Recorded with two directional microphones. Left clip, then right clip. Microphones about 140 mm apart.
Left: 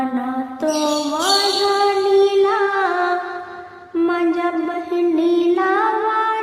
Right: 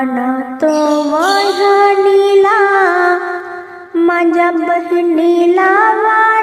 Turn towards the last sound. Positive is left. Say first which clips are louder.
# right 8 dB
turn(degrees=-40)  # may be behind; listen again after turning